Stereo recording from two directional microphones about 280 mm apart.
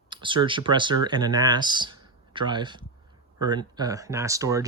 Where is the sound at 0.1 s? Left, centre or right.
Centre.